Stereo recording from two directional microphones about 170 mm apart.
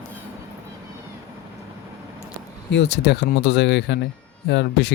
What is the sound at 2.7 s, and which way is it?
Speech, 80° left.